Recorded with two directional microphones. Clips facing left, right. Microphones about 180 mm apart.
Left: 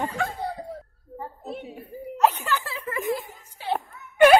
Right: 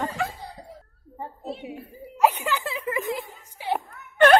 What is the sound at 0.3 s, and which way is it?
Laughter, 60° left (ahead or behind).